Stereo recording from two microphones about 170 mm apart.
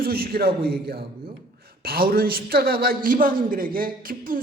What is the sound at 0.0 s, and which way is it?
A man's voice, 65° right (ahead or behind).